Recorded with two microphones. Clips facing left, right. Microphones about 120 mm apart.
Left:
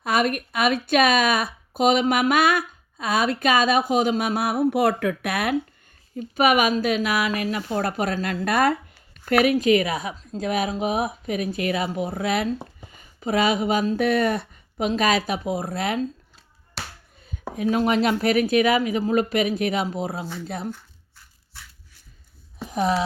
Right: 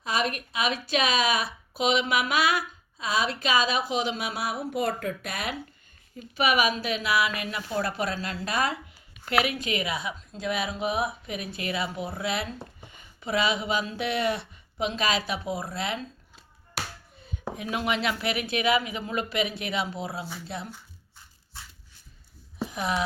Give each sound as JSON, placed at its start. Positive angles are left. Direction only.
{"t": 0.0, "sound": "speech", "side_deg": 55}
{"t": 6.1, "sound": "speech", "side_deg": 50}
{"t": 7.8, "sound": "speech", "side_deg": 50}
{"t": 9.3, "sound": "speech", "side_deg": 45}
{"t": 17.2, "sound": "speech", "side_deg": 40}
{"t": 22.7, "sound": "a sound", "side_deg": 35}